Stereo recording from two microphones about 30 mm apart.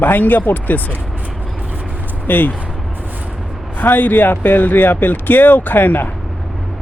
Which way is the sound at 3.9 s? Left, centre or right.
Left.